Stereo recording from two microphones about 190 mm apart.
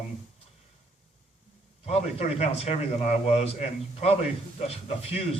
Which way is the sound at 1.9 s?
35° left (ahead or behind).